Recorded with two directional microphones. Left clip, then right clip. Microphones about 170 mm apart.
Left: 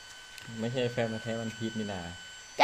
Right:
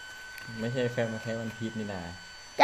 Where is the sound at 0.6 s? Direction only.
40° left (ahead or behind).